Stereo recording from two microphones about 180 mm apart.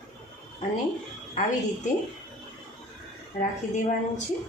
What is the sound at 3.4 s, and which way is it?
Speech, 45° left (ahead or behind).